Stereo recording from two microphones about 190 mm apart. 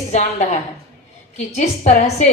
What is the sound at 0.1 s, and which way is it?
A woman's voice, 40° left (ahead or behind).